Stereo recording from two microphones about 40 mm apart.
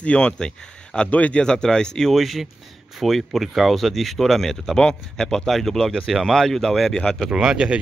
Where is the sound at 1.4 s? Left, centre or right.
Centre.